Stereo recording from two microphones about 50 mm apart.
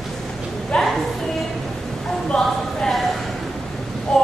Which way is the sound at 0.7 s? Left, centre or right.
Centre.